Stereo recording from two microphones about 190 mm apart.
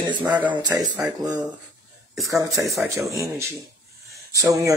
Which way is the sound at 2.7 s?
Centre (ahead or behind).